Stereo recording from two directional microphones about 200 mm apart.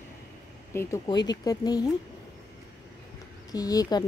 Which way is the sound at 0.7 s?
15° left (ahead or behind).